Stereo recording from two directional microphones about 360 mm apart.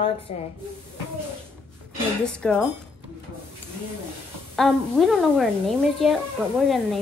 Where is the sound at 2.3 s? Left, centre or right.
Centre.